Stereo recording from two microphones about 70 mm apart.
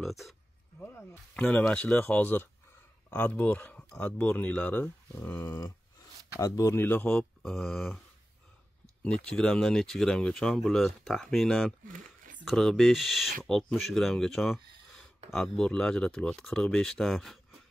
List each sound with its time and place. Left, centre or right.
0.0 s speech: centre
1.3 s a man's voice: centre
6.3 s speech: left
7.1 s speech: centre
9.0 s speech: centre